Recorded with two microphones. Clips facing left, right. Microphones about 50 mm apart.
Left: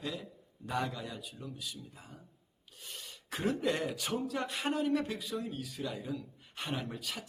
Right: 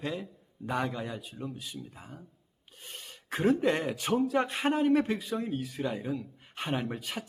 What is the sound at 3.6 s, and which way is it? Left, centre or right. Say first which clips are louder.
Speech: right 5 dB; right.